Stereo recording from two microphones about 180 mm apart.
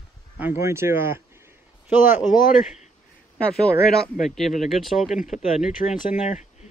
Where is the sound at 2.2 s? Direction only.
45° left (ahead or behind).